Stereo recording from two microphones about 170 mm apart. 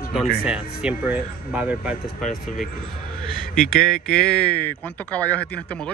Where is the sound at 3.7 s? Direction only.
55° left (ahead or behind).